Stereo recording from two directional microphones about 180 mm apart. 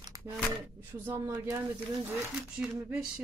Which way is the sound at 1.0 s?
10° right (ahead or behind).